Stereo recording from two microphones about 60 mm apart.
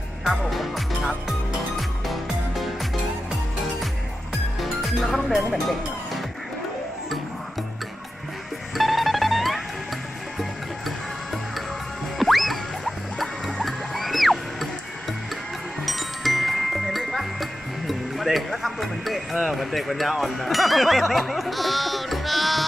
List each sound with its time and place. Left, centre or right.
0.2 s music: centre
4.6 s music: centre
8.7 s music: centre
12.2 s music: centre
15.8 s music: centre